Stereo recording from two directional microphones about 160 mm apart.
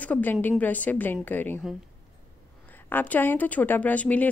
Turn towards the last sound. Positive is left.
turn(degrees=10)  # may be behind; listen again after turning